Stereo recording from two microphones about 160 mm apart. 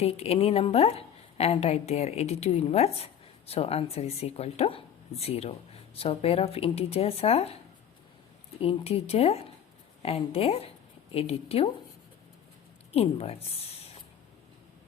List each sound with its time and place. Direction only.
0.0 s a woman's voice: 40° left (ahead or behind)
8.6 s a woman's voice: 40° left (ahead or behind)
12.9 s speech: 40° left (ahead or behind)